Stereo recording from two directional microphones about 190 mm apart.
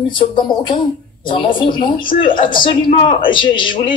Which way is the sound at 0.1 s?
25° left (ahead or behind).